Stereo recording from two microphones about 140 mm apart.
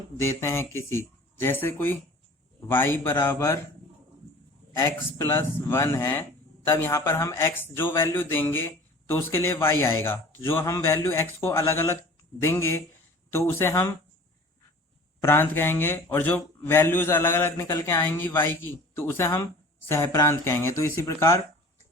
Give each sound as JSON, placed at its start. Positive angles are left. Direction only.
{"t": 0.2, "sound": "a man's voice", "side_deg": 20}
{"t": 4.8, "sound": "a man's voice", "side_deg": 15}
{"t": 15.2, "sound": "a man's voice", "side_deg": 15}